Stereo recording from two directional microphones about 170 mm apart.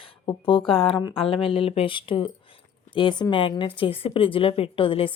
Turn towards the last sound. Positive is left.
turn(degrees=30)  # may be behind; listen again after turning